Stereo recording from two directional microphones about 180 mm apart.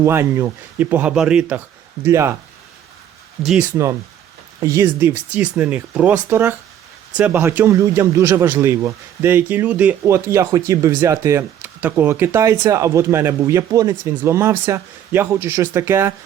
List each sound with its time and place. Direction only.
0.0 s speech: 15° right (ahead or behind)
3.4 s speech: centre (ahead or behind)
4.6 s speech: 15° right (ahead or behind)